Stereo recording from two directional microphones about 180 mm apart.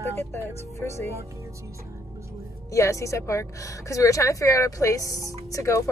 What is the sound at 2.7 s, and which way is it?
A woman's voice, 15° left (ahead or behind).